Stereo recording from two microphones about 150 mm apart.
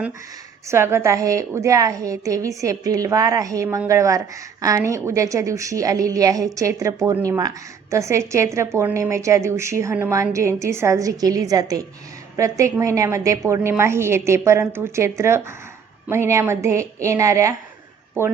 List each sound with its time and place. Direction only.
0.7 s a woman's voice: 15° right (ahead or behind)